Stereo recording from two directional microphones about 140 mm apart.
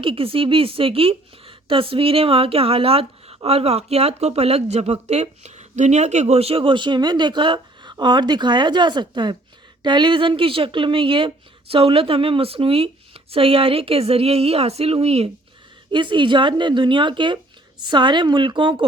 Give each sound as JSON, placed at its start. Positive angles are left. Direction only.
{"t": 0.0, "sound": "a woman's voice", "side_deg": -40}
{"t": 15.9, "sound": "a woman's voice", "side_deg": -35}